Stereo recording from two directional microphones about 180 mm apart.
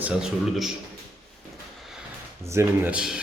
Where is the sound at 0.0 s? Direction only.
5° right (ahead or behind).